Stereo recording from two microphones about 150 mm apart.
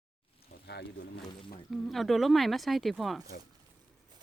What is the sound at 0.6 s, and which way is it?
Boat, 90° left.